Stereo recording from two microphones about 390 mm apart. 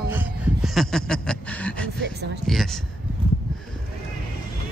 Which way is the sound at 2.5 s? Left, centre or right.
Centre.